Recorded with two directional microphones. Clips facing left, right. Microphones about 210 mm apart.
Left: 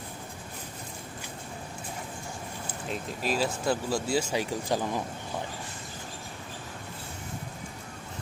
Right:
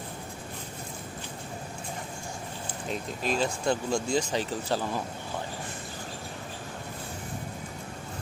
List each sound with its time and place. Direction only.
2.9 s speech: 5° left (ahead or behind)